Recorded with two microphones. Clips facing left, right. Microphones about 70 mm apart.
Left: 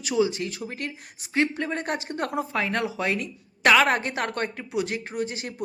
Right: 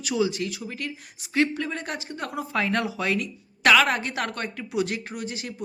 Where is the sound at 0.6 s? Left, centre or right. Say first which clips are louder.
Left 1 dB; left.